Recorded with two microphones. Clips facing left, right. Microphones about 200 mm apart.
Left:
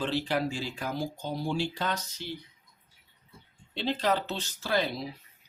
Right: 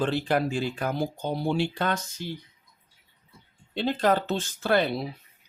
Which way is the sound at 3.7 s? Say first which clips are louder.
Right 4 dB; 50° right (ahead or behind).